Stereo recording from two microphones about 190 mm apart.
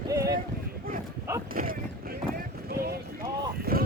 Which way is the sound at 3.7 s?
55° right (ahead or behind).